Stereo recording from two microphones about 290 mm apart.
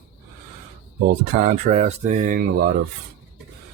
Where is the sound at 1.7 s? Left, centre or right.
Right.